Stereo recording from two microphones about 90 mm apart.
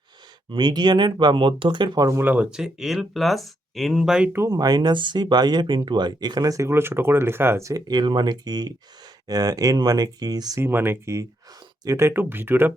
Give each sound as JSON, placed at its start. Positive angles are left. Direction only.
{"t": 0.5, "sound": "speech", "side_deg": -55}
{"t": 2.1, "sound": "speech", "side_deg": -20}
{"t": 2.5, "sound": "speech", "side_deg": -5}
{"t": 4.4, "sound": "speech", "side_deg": -45}
{"t": 7.9, "sound": "speech", "side_deg": -55}
{"t": 10.6, "sound": "speech", "side_deg": -25}